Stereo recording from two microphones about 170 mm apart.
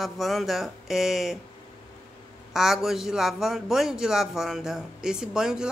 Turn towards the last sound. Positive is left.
turn(degrees=-5)  # may be behind; listen again after turning